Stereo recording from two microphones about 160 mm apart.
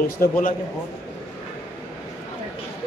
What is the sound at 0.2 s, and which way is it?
Speech, 60° left (ahead or behind).